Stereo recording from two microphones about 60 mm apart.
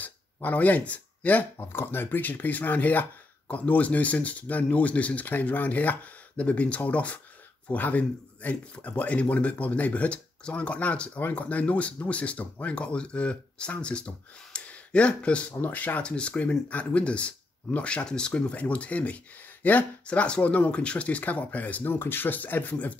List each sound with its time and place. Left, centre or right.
0.0 s speech: left
21.9 s speech: left